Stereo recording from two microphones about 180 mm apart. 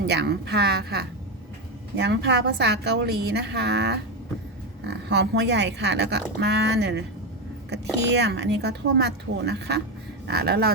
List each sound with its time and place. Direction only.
0.1 s speech: 70° right (ahead or behind)
8.1 s speech: 70° right (ahead or behind)